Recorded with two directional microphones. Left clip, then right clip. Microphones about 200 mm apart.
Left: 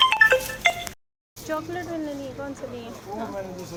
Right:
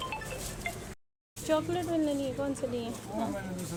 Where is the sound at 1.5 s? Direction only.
15° right (ahead or behind).